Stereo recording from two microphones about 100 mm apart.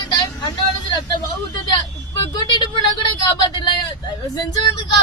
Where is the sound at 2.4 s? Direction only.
45° left (ahead or behind).